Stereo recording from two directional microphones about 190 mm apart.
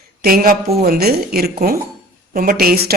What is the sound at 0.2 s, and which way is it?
Speech, 50° right (ahead or behind).